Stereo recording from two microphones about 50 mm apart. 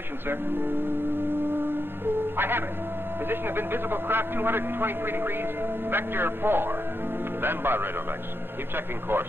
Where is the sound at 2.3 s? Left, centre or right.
Right.